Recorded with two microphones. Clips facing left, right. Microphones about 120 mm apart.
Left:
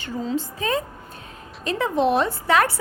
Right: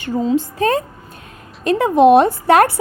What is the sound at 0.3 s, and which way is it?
A woman's voice, 60° right (ahead or behind).